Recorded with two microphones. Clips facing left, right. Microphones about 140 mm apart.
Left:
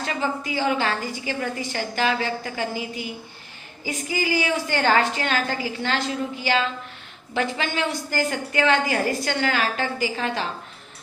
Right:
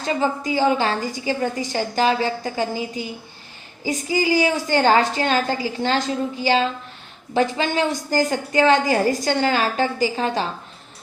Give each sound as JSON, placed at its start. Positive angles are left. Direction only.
{"t": 0.0, "sound": "a woman's voice", "side_deg": -30}